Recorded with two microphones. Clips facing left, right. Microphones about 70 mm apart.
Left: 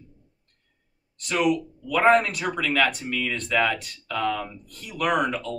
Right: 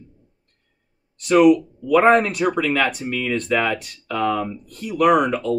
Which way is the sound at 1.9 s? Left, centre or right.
Right.